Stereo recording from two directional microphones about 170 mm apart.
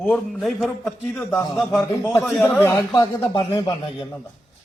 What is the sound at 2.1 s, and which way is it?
Speech, centre (ahead or behind).